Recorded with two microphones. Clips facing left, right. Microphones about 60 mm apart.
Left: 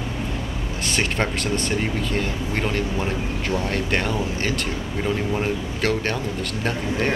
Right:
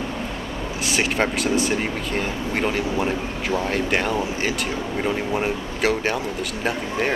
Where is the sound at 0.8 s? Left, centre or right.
Centre.